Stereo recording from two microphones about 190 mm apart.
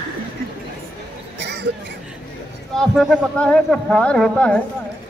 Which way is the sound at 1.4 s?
65° right (ahead or behind).